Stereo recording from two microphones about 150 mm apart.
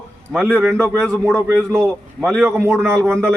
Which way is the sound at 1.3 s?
20° right (ahead or behind).